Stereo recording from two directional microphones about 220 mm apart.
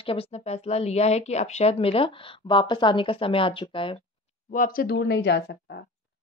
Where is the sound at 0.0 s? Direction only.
25° left (ahead or behind).